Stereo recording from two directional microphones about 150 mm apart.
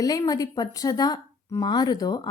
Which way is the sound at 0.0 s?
25° left (ahead or behind).